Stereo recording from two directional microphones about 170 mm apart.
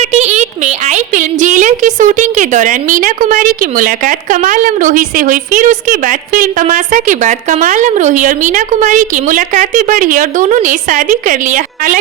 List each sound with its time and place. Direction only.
0.0 s a woman's voice: 40° right (ahead or behind)